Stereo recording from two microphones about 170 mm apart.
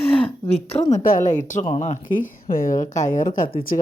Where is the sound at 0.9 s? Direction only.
50° left (ahead or behind).